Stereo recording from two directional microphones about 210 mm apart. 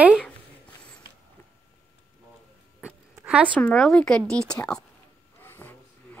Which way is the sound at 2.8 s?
5° right (ahead or behind).